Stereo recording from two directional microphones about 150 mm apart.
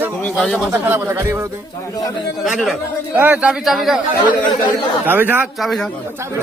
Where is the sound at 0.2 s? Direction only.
10° left (ahead or behind).